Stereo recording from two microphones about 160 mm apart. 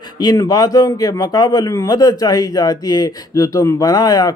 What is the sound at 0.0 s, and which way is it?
Speech, 25° left (ahead or behind).